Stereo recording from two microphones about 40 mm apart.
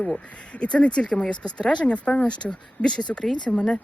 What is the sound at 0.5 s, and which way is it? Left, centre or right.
Speech, left.